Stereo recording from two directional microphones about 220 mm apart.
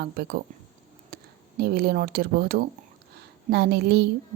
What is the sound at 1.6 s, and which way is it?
Speech, 45° right (ahead or behind).